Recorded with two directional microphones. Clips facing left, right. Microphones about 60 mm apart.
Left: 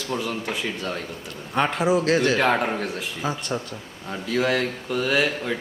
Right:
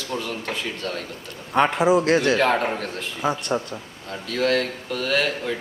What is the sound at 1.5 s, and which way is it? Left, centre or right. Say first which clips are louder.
A man's voice: right 3 dB; centre.